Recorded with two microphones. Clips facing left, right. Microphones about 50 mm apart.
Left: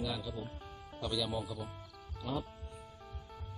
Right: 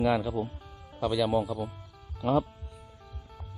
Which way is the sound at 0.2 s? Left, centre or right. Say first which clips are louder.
Right 11 dB; right.